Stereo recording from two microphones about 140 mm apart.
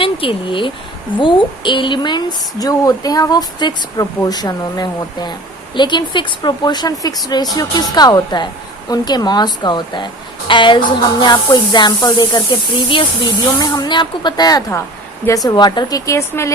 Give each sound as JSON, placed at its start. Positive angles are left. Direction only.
{"t": 0.0, "sound": "speech", "side_deg": 40}